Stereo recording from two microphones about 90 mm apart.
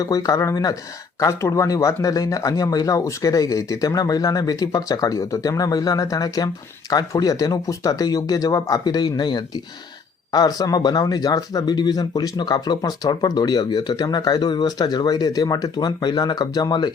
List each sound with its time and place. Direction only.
0.0 s speech: 40° left (ahead or behind)